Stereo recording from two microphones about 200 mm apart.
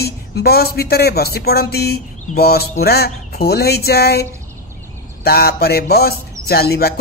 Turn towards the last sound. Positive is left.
turn(degrees=50)  # may be behind; listen again after turning